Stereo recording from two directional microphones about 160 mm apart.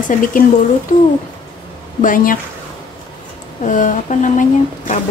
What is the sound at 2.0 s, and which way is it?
Speech, 60° left (ahead or behind).